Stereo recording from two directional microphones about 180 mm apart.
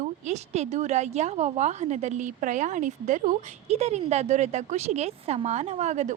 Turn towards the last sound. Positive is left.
turn(degrees=-40)  # may be behind; listen again after turning